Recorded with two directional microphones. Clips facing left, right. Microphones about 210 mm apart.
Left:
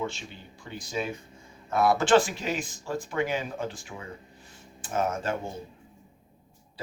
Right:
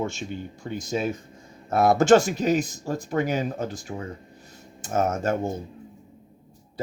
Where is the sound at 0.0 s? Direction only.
45° right (ahead or behind).